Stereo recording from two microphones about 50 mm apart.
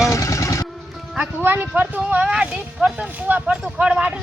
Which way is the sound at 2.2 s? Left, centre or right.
Centre.